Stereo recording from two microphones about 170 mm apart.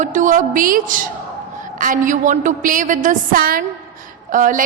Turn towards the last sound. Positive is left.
turn(degrees=-50)  # may be behind; listen again after turning